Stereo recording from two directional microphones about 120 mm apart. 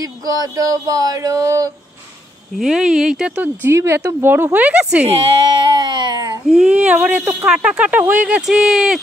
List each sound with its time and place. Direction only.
0.0 s a sound: 30° right (ahead or behind)
2.6 s speech: 5° right (ahead or behind)
3.7 s a woman's voice: 25° right (ahead or behind)
5.0 s speech: 50° right (ahead or behind); by 6.4 s 35° right (ahead or behind)
6.4 s a woman's voice: 5° right (ahead or behind)